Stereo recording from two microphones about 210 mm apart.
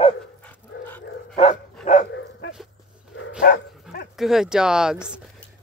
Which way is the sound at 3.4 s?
45° left (ahead or behind).